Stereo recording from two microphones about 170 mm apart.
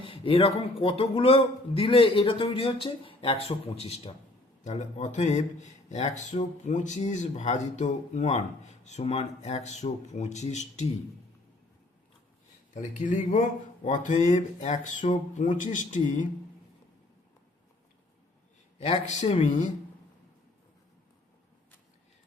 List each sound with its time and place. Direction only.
0.0 s a man's voice: 30° left (ahead or behind)
12.7 s speech: 50° left (ahead or behind)
18.8 s speech: 40° left (ahead or behind)